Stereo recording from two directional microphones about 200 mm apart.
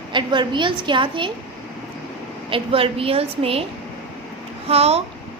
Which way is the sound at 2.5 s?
25° right (ahead or behind).